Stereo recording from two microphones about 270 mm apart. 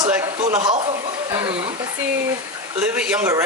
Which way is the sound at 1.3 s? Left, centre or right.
Centre.